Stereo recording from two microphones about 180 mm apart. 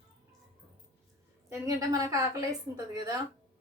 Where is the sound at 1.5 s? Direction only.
20° right (ahead or behind).